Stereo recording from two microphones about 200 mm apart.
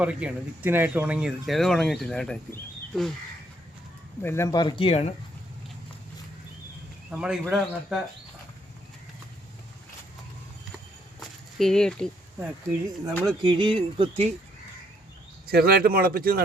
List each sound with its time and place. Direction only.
0.0 s speech: 5° right (ahead or behind)
4.2 s speech: 10° left (ahead or behind); by 5.1 s 30° left (ahead or behind)
7.1 s speech: 5° right (ahead or behind)
11.2 s a sound: centre (ahead or behind)
12.4 s speech: 10° right (ahead or behind)
13.5 s speech: 25° right (ahead or behind)
15.4 s speech: 50° right (ahead or behind)